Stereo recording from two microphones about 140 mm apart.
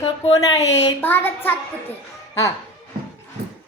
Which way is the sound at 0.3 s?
25° left (ahead or behind).